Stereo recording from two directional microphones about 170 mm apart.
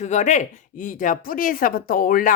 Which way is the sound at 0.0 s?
45° left (ahead or behind).